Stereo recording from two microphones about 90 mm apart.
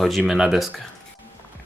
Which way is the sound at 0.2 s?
5° right (ahead or behind).